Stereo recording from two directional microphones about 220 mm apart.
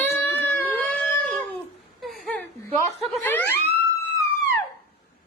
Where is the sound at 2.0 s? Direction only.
Centre (ahead or behind).